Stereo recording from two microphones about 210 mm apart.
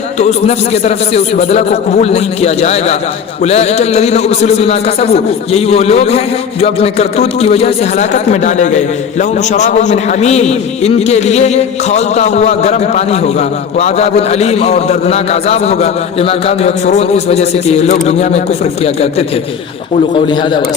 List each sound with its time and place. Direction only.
0.2 s a man's voice: 30° left (ahead or behind)
20.1 s a man's voice: 20° left (ahead or behind)